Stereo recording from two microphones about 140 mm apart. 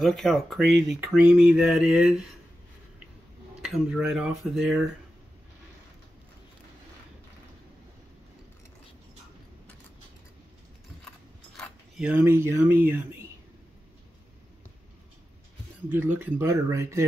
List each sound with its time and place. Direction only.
0.0 s speech: centre (ahead or behind)
3.6 s speech: 5° right (ahead or behind)
12.0 s speech: 10° right (ahead or behind)
15.9 s speech: 15° right (ahead or behind)